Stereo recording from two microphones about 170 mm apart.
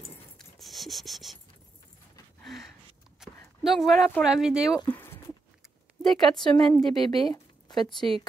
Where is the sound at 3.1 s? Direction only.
Centre (ahead or behind).